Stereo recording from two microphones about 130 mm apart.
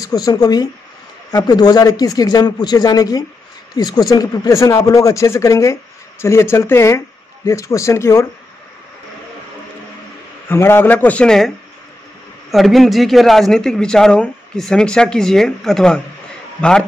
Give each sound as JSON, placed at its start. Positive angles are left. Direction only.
{"t": 0.0, "sound": "speech", "side_deg": 30}
{"t": 10.5, "sound": "a man's voice", "side_deg": 20}